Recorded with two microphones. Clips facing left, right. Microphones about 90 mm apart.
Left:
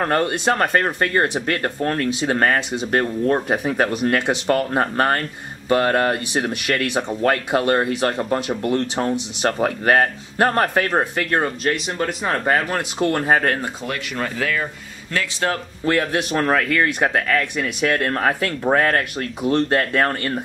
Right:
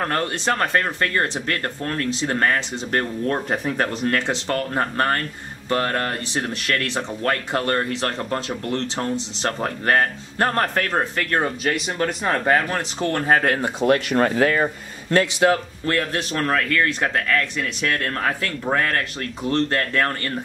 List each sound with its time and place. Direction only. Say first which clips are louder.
0.1 s a man's voice: left 4 dB; 10° left (ahead or behind)
13.8 s speech: right 12 dB; 45° right (ahead or behind)
15.8 s a man's voice: left 3 dB; 15° left (ahead or behind)